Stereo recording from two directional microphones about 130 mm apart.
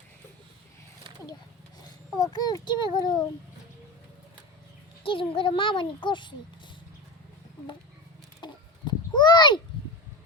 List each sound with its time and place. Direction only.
2.2 s a child's voice: 30° left (ahead or behind)
5.0 s a child's voice: 45° left (ahead or behind)
8.4 s chicken: 35° left (ahead or behind)
8.9 s a sound: 35° left (ahead or behind)